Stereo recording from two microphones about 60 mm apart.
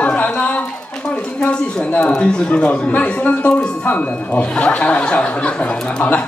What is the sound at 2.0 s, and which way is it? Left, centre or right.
A man's voice, centre.